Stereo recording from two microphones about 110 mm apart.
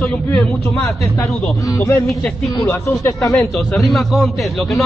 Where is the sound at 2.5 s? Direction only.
25° left (ahead or behind).